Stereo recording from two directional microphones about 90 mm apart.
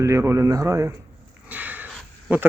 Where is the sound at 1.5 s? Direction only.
20° right (ahead or behind).